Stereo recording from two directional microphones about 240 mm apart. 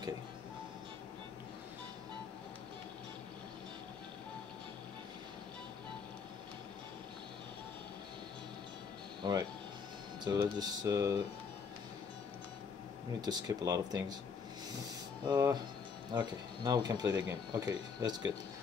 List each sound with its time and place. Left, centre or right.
9.2 s speech: centre
13.5 s speech: centre
15.2 s speech: centre